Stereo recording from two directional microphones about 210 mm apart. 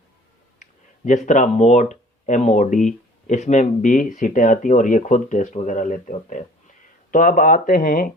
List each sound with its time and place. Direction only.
0.6 s speech: 35° left (ahead or behind)